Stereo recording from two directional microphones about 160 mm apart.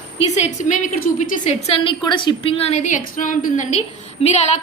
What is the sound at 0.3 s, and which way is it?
Speech, 50° left (ahead or behind).